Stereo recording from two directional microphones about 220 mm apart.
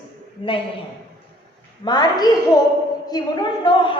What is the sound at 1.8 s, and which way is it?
A woman's voice, 20° left (ahead or behind).